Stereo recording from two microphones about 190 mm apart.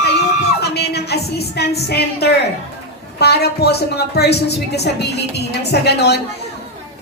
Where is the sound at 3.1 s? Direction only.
60° left (ahead or behind).